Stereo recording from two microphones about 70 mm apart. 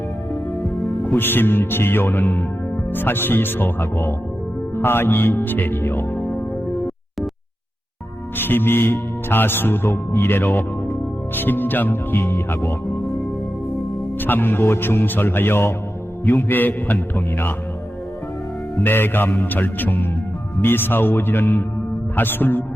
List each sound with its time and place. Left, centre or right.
1.0 s speech: left
8.4 s speech: left
14.2 s speech: left
18.8 s speech: left